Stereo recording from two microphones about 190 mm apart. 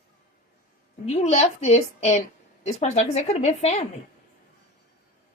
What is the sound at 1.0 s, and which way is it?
Speech, 35° left (ahead or behind).